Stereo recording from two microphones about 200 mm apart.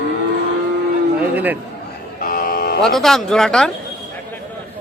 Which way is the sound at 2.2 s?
45° left (ahead or behind).